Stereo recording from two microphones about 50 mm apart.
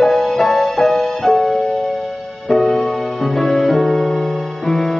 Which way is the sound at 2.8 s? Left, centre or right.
Left.